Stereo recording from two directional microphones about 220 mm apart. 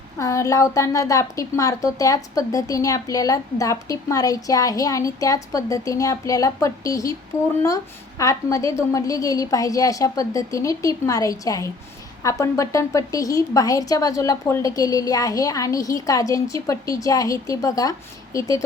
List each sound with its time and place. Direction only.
0.2 s a woman's voice: 15° left (ahead or behind)
8.2 s a woman's voice: 15° left (ahead or behind)